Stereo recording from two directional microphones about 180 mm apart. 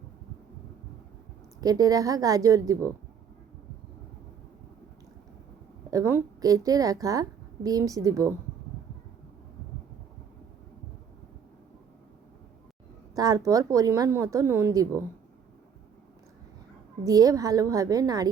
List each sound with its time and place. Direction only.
1.6 s a woman's voice: 20° right (ahead or behind)
5.9 s a woman's voice: 15° right (ahead or behind)
13.1 s speech: 20° right (ahead or behind)
17.0 s a woman's voice: 20° right (ahead or behind)